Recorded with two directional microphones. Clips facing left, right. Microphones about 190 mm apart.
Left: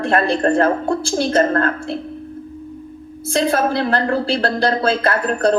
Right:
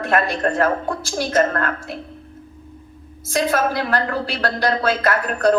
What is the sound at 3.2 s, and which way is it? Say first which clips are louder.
A woman's voice: left 2 dB; 30° left (ahead or behind).